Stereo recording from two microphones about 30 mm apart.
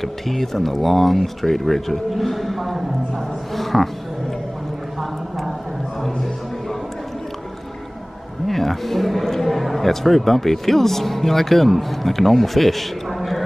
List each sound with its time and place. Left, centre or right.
0.0 s speech: centre
3.5 s music: centre
8.5 s speech: centre